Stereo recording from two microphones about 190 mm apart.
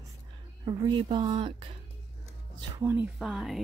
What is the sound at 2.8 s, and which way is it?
Speech, 15° right (ahead or behind).